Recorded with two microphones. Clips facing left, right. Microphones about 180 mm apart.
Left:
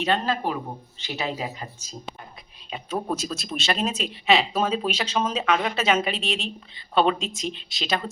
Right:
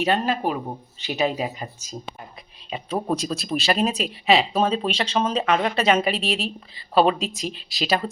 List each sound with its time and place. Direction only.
0.0 s speech: 15° right (ahead or behind)
3.2 s speech: centre (ahead or behind)